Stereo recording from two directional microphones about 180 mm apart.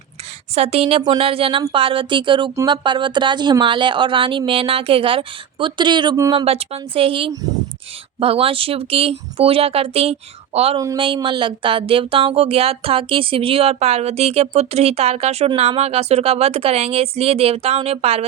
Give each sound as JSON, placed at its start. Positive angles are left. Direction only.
{"t": 0.5, "sound": "speech", "side_deg": -35}
{"t": 6.3, "sound": "speech", "side_deg": -35}